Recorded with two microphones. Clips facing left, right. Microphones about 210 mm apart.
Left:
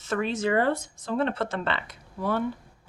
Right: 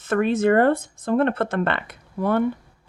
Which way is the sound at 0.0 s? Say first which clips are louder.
Right 7 dB; 55° right (ahead or behind).